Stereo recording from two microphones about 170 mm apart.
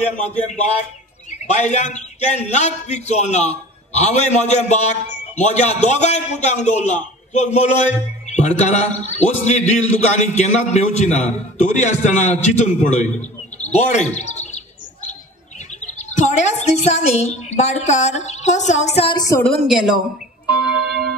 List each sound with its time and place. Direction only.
1.5 s a man's voice: 40° left (ahead or behind)
14.1 s chirp: 40° left (ahead or behind)
15.8 s chirp: 45° left (ahead or behind)
16.6 s speech: 40° left (ahead or behind)
19.1 s a woman's voice: 20° left (ahead or behind)
19.4 s a woman's voice: centre (ahead or behind)
20.6 s a sound: centre (ahead or behind)